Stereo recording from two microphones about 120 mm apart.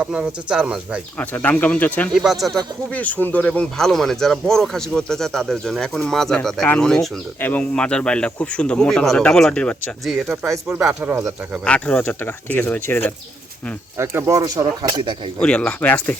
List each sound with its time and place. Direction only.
0.0 s speech: 10° right (ahead or behind)
1.2 s speech: 15° left (ahead or behind)
11.0 s speech: 20° right (ahead or behind)
11.6 s speech: 10° left (ahead or behind)
13.9 s speech: 20° right (ahead or behind); by 15.1 s 35° right (ahead or behind)
15.4 s speech: 10° left (ahead or behind)